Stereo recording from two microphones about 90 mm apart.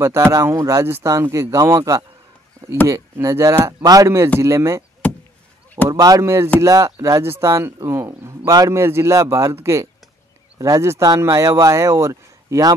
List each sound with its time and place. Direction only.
0.0 s a man's voice: 30° right (ahead or behind)
5.0 s chop: 20° left (ahead or behind)
5.9 s speech: 40° right (ahead or behind)
8.5 s a man's voice: 45° right (ahead or behind)
8.7 s speech: 30° right (ahead or behind)